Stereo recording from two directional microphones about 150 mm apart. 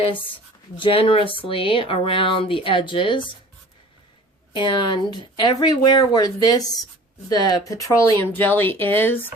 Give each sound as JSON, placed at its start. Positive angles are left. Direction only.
{"t": 0.8, "sound": "speech", "side_deg": 40}
{"t": 4.5, "sound": "speech", "side_deg": 30}